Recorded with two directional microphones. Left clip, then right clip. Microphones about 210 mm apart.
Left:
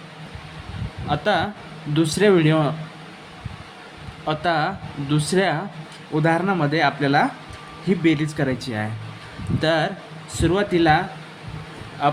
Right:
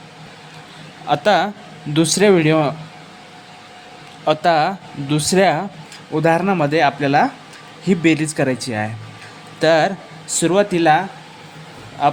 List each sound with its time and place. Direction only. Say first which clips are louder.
1.0 s speech: right 6 dB; 30° right (ahead or behind)
4.3 s speech: right 6 dB; 30° right (ahead or behind)